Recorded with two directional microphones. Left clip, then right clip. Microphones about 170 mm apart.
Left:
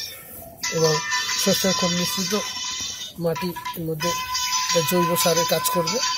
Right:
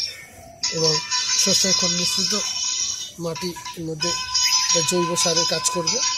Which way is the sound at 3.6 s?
20° right (ahead or behind).